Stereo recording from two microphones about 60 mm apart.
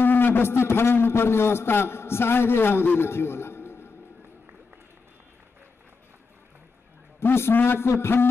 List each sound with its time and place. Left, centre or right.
0.0 s a man's voice: left
7.2 s a man's voice: left